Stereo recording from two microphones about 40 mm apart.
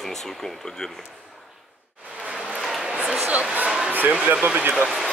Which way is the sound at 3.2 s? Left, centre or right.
Right.